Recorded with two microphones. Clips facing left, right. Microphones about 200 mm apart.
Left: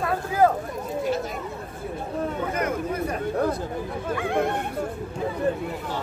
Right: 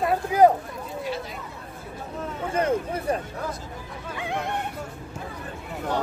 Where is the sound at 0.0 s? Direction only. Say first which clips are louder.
Right 3 dB; 20° right (ahead or behind).